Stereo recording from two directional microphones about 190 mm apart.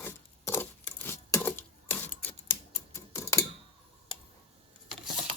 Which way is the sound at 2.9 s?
15° left (ahead or behind).